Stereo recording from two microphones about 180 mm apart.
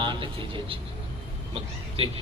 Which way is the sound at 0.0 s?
25° right (ahead or behind).